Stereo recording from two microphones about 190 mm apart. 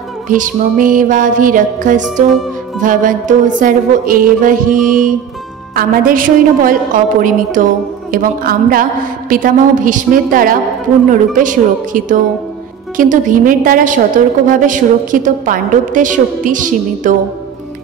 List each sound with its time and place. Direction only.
0.3 s a woman's voice: 45° right (ahead or behind)